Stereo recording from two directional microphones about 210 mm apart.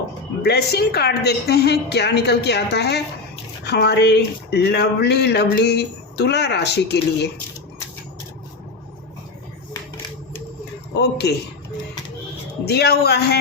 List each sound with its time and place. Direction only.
0.4 s speech: 50° left (ahead or behind)
10.9 s speech: 50° left (ahead or behind)
12.6 s speech: 50° left (ahead or behind)